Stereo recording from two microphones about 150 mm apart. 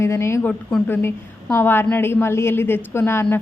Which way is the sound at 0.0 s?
20° left (ahead or behind).